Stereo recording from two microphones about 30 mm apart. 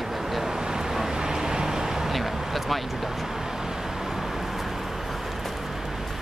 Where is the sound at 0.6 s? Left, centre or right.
Right.